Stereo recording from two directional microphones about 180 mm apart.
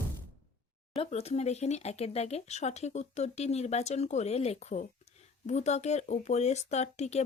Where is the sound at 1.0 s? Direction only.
35° left (ahead or behind).